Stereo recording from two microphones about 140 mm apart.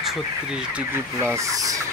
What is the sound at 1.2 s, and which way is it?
Speech, 20° right (ahead or behind).